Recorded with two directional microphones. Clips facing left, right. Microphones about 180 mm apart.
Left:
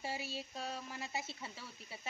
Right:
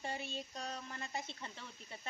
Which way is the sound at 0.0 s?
5° left (ahead or behind).